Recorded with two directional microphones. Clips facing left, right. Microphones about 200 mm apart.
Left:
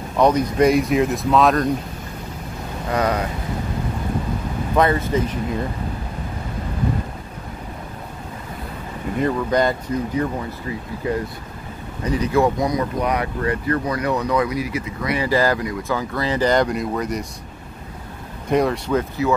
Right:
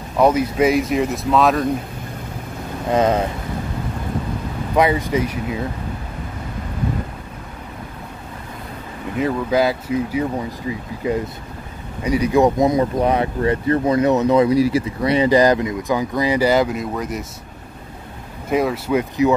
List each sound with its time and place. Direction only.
0.2 s speech: 5° right (ahead or behind)
2.9 s speech: 25° right (ahead or behind)
4.7 s speech: 10° right (ahead or behind)
9.2 s speech: 5° right (ahead or behind)
12.0 s speech: 10° right (ahead or behind)
18.5 s speech: 5° right (ahead or behind)